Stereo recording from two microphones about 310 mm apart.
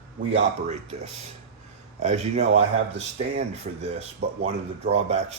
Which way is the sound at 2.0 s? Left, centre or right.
Right.